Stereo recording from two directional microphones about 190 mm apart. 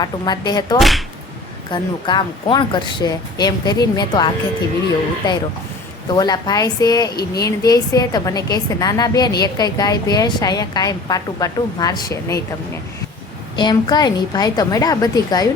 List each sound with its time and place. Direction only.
0.0 s a woman's voice: 20° left (ahead or behind)
0.8 s speech: centre (ahead or behind)
1.7 s a woman's voice: 25° left (ahead or behind)
6.1 s a woman's voice: 20° left (ahead or behind)
13.6 s a woman's voice: 25° left (ahead or behind)